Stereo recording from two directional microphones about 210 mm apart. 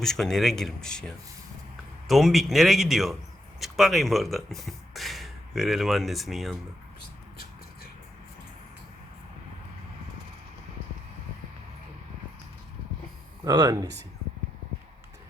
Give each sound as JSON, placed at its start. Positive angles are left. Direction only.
{"t": 0.0, "sound": "speech", "side_deg": 0}
{"t": 13.4, "sound": "speech", "side_deg": -15}